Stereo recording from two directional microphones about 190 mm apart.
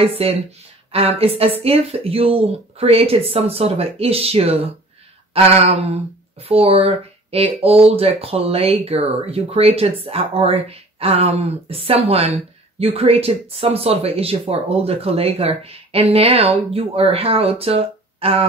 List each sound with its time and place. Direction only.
0.0 s speech: 30° right (ahead or behind)